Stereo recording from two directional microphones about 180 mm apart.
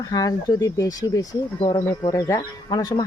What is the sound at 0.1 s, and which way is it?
Speech, 20° left (ahead or behind).